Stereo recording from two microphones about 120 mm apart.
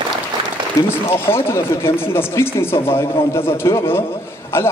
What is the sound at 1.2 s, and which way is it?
A man's voice, 20° left (ahead or behind).